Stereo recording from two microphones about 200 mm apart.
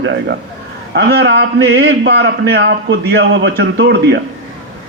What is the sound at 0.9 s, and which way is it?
A man's voice, 60° right (ahead or behind).